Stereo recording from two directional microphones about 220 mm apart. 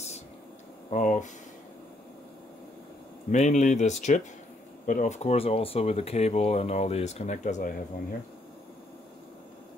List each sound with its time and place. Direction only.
0.8 s speech: 35° left (ahead or behind)
3.3 s speech: 35° left (ahead or behind)